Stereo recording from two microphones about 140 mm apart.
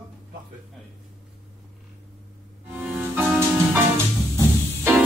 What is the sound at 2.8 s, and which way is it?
Music, 10° right (ahead or behind).